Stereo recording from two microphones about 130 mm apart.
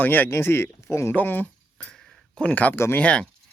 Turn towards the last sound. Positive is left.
turn(degrees=10)  # may be behind; listen again after turning